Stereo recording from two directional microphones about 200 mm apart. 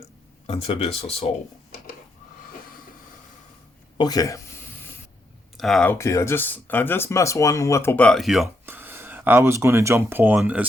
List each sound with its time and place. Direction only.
0.4 s speech: 30° left (ahead or behind)
3.9 s a sound: 20° left (ahead or behind)
5.5 s speech: centre (ahead or behind)
8.6 s speech: 10° right (ahead or behind)